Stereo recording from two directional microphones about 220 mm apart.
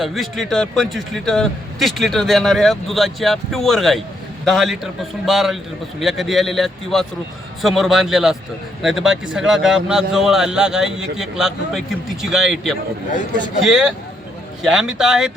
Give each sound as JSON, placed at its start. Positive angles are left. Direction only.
{"t": 0.0, "sound": "a man's voice", "side_deg": 0}